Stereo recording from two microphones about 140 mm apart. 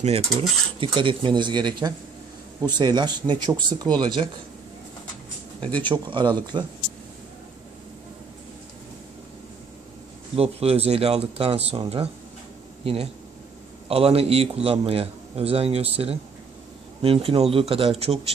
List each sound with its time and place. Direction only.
0.0 s speech: 45° right (ahead or behind)
5.9 s speech: 35° right (ahead or behind)
10.3 s a man's voice: 45° right (ahead or behind)